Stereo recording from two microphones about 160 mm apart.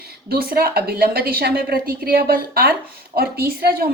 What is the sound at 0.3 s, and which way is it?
Speech, 70° right (ahead or behind).